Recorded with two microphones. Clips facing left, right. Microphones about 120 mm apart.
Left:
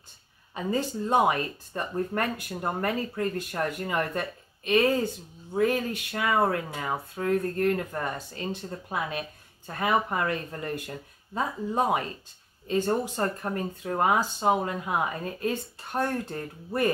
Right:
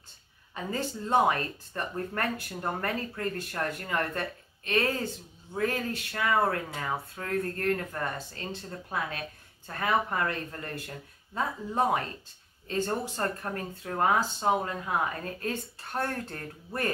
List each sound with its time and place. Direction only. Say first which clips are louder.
0.6 s speech: left 5 dB; 15° left (ahead or behind)